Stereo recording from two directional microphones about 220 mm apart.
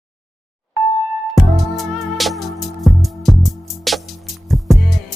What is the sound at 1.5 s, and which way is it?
Music, centre (ahead or behind).